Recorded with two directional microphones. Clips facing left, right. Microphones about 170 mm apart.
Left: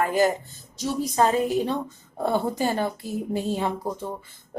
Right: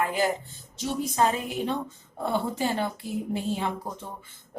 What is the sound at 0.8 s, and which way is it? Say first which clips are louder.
Speech: left 3 dB; 35° left (ahead or behind).